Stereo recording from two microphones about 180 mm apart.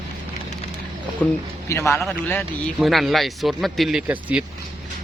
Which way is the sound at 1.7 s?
15° left (ahead or behind).